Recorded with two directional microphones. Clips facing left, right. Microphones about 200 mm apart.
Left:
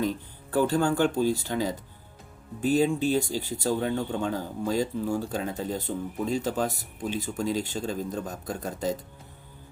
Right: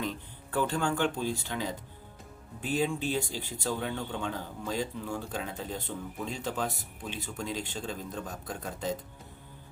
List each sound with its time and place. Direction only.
0.5 s speech: 40° left (ahead or behind)